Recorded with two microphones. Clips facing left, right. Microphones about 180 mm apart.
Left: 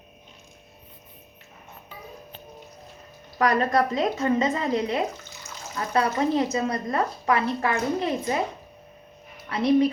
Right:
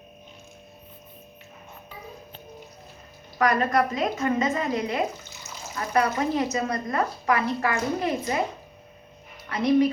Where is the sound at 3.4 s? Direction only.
30° left (ahead or behind).